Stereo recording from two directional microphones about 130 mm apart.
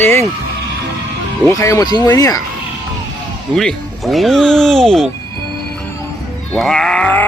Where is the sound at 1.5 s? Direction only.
25° left (ahead or behind).